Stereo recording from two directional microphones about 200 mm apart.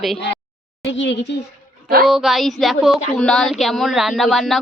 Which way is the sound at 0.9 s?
65° left (ahead or behind).